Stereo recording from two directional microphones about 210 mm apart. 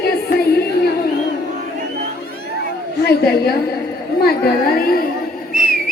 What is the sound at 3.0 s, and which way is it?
Chatter, 50° left (ahead or behind).